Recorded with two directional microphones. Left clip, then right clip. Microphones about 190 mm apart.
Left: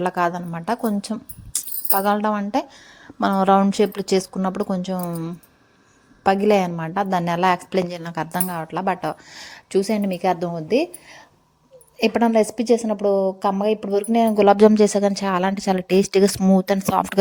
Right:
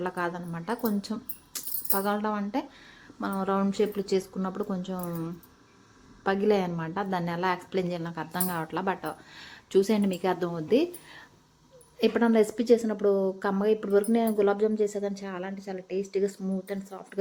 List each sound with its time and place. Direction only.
0.0 s a woman's voice: 40° left (ahead or behind)
8.5 s a woman's voice: 25° left (ahead or behind)
9.6 s a woman's voice: 25° left (ahead or behind); by 17.2 s 60° left (ahead or behind)